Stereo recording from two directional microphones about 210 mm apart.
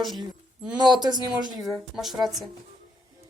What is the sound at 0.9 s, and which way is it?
Speech, 20° right (ahead or behind).